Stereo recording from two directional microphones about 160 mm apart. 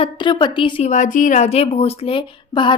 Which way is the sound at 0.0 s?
30° left (ahead or behind).